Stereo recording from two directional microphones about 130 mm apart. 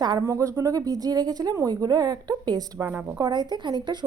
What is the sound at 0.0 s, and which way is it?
Speech, 30° right (ahead or behind).